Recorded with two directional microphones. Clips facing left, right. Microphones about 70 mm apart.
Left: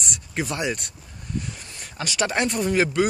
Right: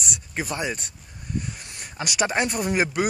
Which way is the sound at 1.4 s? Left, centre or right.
Centre.